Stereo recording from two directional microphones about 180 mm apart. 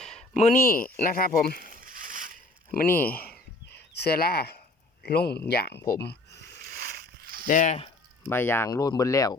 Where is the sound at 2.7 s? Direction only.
55° left (ahead or behind).